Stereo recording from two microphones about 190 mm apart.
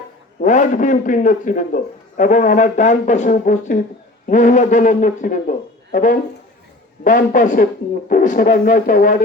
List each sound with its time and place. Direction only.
0.4 s a man's voice: 40° left (ahead or behind)